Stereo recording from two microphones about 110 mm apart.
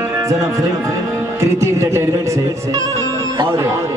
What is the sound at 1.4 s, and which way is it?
A man's voice, 25° right (ahead or behind).